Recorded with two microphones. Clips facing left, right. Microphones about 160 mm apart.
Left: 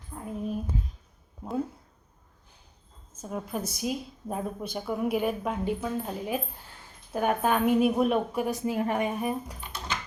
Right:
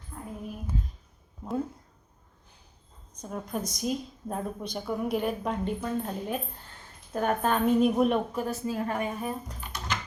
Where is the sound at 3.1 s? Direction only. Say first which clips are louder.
Left 1 dB; 5° left (ahead or behind).